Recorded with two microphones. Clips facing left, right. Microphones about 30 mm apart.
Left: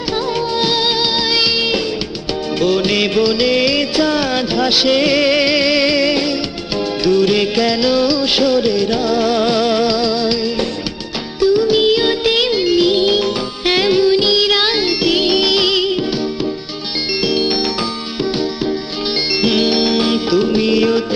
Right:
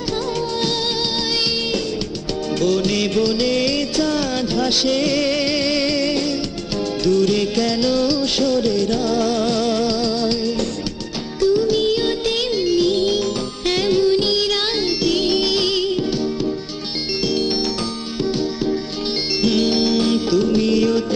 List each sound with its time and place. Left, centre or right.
0.6 s music: left
2.6 s music: left
11.4 s music: left
19.4 s music: left